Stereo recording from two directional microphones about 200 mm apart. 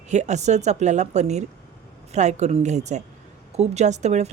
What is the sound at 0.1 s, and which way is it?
A woman's voice, 35° right (ahead or behind).